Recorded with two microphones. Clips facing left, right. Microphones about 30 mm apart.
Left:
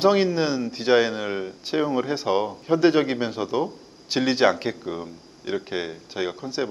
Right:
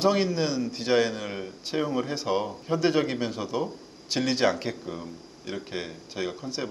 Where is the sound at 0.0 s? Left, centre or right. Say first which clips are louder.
Left 4 dB; centre.